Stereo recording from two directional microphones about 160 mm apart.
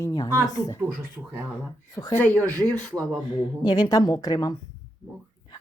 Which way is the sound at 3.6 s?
25° left (ahead or behind).